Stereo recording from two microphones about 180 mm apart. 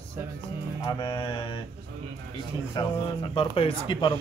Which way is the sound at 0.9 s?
25° left (ahead or behind).